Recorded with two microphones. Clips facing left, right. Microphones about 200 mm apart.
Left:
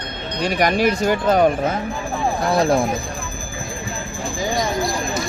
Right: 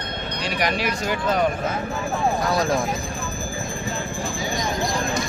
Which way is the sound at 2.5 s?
30° left (ahead or behind).